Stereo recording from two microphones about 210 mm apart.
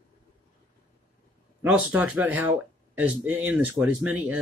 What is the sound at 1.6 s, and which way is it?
Speech, 5° right (ahead or behind).